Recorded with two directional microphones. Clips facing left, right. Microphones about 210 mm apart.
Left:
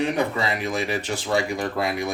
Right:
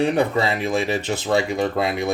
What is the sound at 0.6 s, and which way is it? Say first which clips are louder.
Speech: right 4 dB; 25° right (ahead or behind).